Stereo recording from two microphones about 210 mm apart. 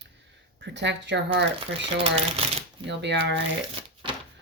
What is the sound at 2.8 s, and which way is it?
Speech, 55° right (ahead or behind).